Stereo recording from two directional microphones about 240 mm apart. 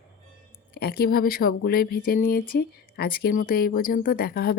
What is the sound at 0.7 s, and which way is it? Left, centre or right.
A woman's voice, left.